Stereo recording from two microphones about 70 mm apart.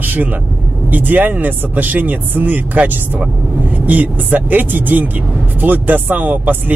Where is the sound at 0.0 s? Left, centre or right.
Right.